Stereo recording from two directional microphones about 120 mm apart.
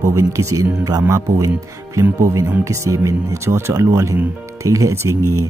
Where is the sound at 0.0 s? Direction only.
25° right (ahead or behind).